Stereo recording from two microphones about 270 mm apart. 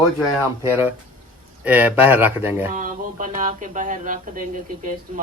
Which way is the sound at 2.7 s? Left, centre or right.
Right.